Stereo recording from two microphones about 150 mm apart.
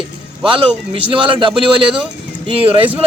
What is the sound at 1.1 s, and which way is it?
A man's voice, 35° right (ahead or behind).